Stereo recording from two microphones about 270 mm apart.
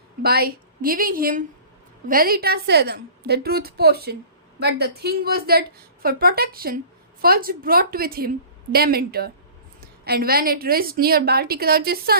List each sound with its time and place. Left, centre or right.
0.2 s a woman's voice: right